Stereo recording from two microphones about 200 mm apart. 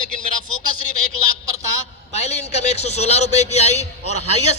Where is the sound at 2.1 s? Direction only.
30° left (ahead or behind).